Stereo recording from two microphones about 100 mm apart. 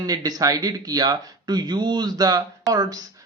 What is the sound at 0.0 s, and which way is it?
Speech, 40° right (ahead or behind).